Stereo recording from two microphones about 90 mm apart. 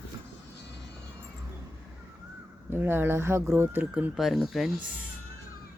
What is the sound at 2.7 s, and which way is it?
Speech, 25° right (ahead or behind).